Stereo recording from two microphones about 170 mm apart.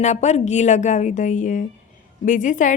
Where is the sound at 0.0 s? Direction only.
45° left (ahead or behind).